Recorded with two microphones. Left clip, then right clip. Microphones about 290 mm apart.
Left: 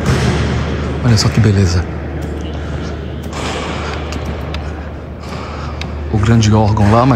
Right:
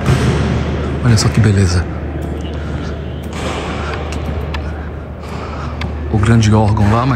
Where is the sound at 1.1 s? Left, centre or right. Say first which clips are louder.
Left 1 dB; centre.